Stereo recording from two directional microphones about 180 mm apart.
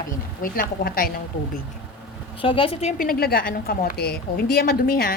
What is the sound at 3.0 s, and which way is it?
A woman's voice, 55° left (ahead or behind).